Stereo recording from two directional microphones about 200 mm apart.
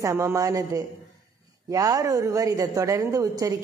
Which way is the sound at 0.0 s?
15° right (ahead or behind).